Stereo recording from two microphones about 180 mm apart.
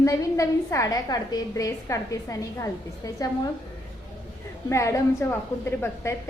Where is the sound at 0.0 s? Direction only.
20° left (ahead or behind).